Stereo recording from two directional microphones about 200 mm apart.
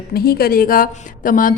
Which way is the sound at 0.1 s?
50° left (ahead or behind).